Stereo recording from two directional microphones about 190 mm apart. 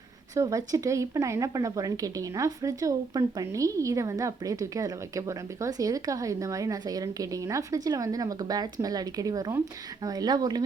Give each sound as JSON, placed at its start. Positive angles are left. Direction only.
{"t": 0.3, "sound": "speech", "side_deg": -15}